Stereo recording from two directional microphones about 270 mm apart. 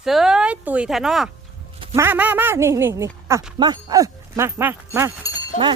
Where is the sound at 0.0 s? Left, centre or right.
Centre.